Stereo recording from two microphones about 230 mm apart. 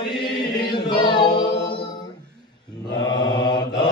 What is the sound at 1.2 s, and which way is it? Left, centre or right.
Singing, centre.